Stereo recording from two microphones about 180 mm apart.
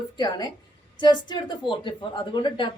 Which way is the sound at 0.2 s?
25° left (ahead or behind).